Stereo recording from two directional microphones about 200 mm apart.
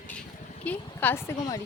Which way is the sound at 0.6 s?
10° left (ahead or behind).